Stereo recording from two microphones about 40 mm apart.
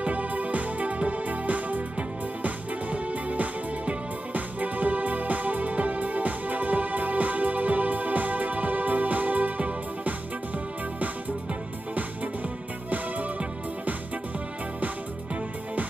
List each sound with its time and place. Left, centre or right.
0.0 s music: right